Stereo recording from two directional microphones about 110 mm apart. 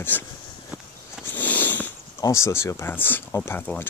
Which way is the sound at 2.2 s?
25° left (ahead or behind).